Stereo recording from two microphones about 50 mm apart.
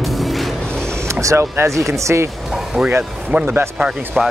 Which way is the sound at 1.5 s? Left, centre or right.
Right.